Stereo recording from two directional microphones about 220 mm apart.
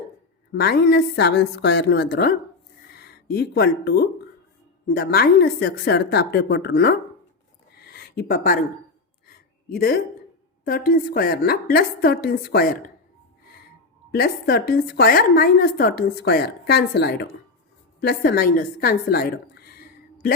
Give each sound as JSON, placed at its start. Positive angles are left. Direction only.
{"t": 0.5, "sound": "a woman's voice", "side_deg": 45}
{"t": 7.8, "sound": "a sound", "side_deg": 45}
{"t": 10.7, "sound": "a woman's voice", "side_deg": 40}
{"t": 14.1, "sound": "a woman's voice", "side_deg": 45}